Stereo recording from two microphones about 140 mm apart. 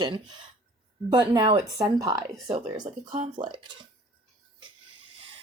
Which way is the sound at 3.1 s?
50° right (ahead or behind).